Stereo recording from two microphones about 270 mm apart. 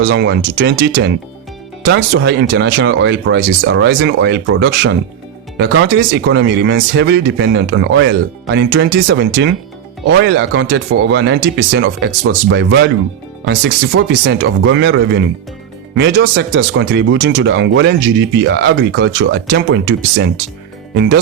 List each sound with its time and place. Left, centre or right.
0.1 s speech: right